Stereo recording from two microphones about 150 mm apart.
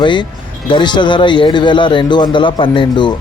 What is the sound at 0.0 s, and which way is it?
Speech, 30° left (ahead or behind).